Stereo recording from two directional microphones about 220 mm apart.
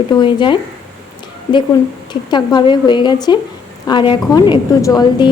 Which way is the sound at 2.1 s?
20° left (ahead or behind).